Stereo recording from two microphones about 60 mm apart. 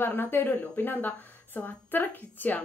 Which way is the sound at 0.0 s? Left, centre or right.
Left.